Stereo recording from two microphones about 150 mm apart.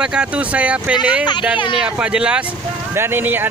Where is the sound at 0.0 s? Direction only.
5° right (ahead or behind).